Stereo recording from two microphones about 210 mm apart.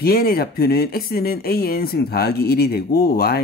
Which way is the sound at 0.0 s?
45° left (ahead or behind).